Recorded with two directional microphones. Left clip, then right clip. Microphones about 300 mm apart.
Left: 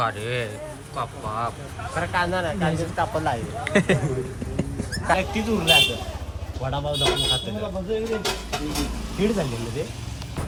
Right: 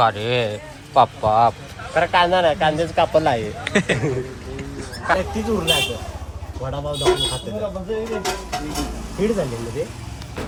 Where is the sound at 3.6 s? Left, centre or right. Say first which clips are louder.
Even; centre.